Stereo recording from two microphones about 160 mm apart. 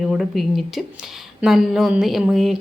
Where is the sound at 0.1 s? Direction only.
Centre (ahead or behind).